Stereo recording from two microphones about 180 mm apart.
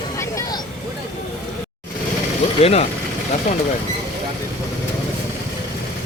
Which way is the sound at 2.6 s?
35° left (ahead or behind).